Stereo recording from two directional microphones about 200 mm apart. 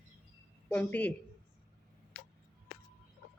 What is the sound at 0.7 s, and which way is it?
Speech, 5° left (ahead or behind).